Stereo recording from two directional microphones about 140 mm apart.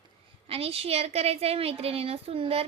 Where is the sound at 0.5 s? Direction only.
45° right (ahead or behind).